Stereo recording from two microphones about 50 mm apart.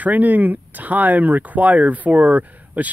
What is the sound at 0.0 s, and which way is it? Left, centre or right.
Speech, right.